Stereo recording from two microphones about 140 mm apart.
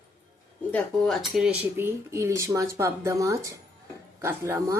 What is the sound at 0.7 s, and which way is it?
Speech, 10° left (ahead or behind).